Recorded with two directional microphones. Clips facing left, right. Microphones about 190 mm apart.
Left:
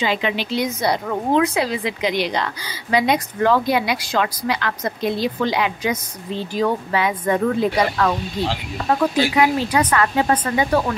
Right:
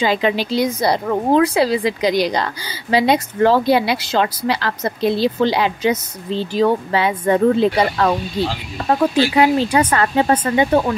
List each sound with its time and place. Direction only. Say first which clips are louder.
0.0 s a woman's voice: right 4 dB; 35° right (ahead or behind)